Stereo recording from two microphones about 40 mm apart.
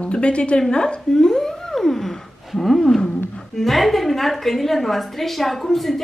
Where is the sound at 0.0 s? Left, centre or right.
Left.